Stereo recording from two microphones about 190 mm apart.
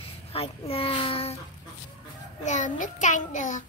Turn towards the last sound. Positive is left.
turn(degrees=40)  # may be behind; listen again after turning